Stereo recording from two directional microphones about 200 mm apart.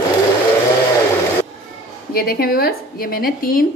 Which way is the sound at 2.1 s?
50° left (ahead or behind).